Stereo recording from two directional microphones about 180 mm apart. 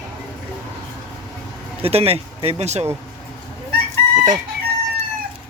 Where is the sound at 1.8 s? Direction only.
35° right (ahead or behind).